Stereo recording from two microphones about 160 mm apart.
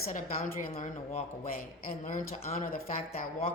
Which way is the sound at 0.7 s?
45° left (ahead or behind).